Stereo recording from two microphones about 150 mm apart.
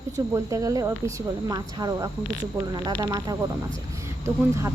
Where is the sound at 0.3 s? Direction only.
20° right (ahead or behind).